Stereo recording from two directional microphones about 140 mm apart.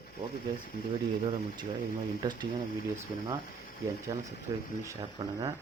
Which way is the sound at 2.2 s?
30° right (ahead or behind).